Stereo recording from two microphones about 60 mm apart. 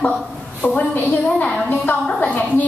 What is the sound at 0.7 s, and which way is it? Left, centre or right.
A woman's voice, left.